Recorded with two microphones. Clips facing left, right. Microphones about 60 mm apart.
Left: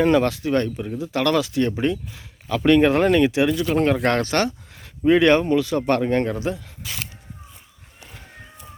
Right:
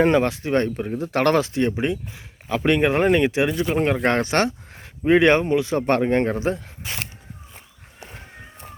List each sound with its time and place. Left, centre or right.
0.0 s speech: right